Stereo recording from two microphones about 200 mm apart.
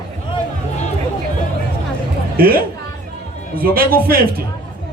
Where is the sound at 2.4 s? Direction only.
45° right (ahead or behind).